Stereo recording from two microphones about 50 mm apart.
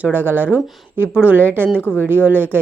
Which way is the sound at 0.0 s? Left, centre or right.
Right.